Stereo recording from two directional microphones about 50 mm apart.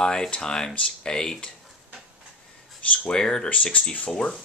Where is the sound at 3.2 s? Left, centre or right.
Centre.